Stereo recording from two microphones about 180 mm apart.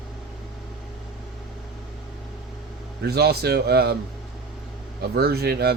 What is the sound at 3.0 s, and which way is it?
Speech, 60° right (ahead or behind).